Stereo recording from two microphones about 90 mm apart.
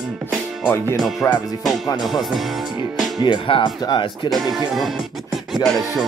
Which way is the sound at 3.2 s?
65° left (ahead or behind).